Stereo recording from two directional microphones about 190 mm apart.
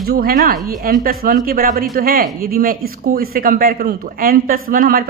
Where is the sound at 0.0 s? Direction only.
55° right (ahead or behind).